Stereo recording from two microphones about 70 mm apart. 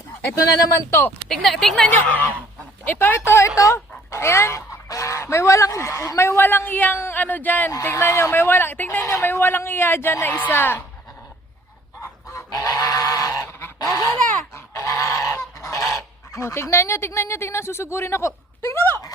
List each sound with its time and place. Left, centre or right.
0.9 s speech: left
1.3 s speech: centre
2.0 s goose: left
2.8 s speech: left
7.9 s speech: left
9.0 s speech: left
12.3 s goose: left